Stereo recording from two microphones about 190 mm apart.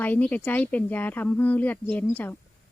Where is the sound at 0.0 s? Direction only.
10° left (ahead or behind).